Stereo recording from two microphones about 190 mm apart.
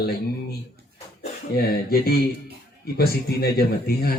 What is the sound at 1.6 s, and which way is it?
A man's voice, 55° left (ahead or behind).